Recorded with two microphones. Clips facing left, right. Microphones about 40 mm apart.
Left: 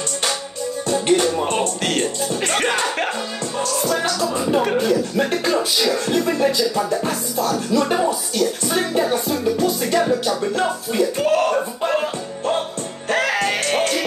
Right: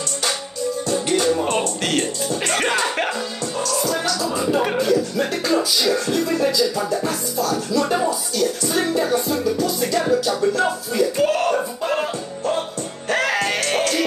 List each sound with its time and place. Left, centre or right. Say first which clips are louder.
0.8 s music: left 3 dB; left
1.3 s speech: even; centre
3.8 s music: left 3 dB; left
4.7 s music: left 1 dB; left
9.1 s music: even; left
11.1 s speech: left 2 dB; centre
13.1 s music: left 1 dB; centre